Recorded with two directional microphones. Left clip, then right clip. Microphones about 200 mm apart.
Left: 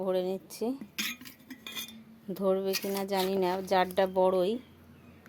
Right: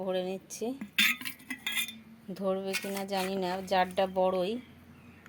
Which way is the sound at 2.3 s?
20° left (ahead or behind).